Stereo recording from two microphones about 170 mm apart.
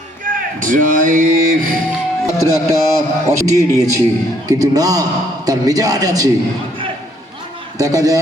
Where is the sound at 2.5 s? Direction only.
20° right (ahead or behind).